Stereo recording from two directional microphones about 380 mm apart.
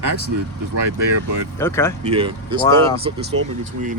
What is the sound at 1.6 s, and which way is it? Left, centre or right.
Speech, centre.